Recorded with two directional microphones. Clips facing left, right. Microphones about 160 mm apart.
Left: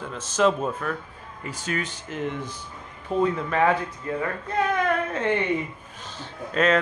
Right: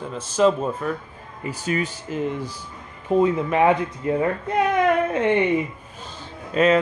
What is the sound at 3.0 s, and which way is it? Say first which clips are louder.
Speech: right 5 dB; 15° right (ahead or behind).